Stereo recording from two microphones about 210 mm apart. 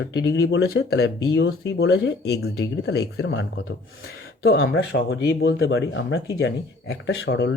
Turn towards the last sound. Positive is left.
turn(degrees=55)  # may be behind; listen again after turning